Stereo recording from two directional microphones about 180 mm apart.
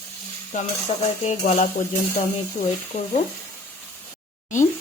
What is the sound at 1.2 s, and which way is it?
Speech, 40° left (ahead or behind).